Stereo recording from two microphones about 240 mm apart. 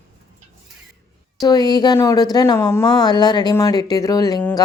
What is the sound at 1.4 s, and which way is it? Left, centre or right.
Speech, centre.